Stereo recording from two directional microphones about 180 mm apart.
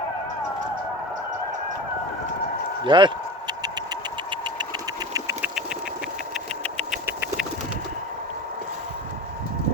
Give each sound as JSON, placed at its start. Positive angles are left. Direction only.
{"t": 2.8, "sound": "a sound", "side_deg": -25}
{"t": 4.3, "sound": "engine", "side_deg": -25}
{"t": 5.1, "sound": "engine", "side_deg": -15}